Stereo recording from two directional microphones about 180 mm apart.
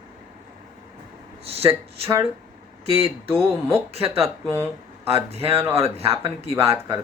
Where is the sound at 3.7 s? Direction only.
35° right (ahead or behind).